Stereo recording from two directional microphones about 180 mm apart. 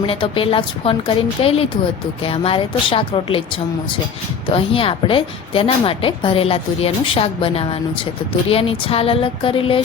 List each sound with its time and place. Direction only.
0.0 s a woman's voice: 30° left (ahead or behind)
4.4 s a woman's voice: 30° left (ahead or behind)